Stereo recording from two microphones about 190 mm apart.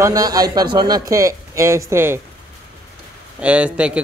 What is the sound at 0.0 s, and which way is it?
A man's voice, 20° right (ahead or behind).